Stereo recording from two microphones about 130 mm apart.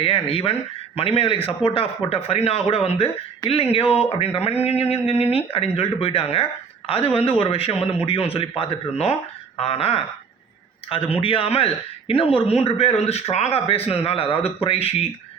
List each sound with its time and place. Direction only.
0.0 s speech: 45° left (ahead or behind)